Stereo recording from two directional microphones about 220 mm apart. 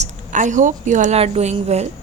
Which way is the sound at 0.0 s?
35° right (ahead or behind).